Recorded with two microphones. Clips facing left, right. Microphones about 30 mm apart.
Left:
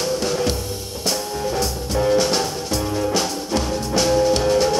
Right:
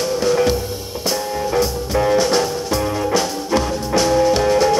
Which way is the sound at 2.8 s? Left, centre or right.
Centre.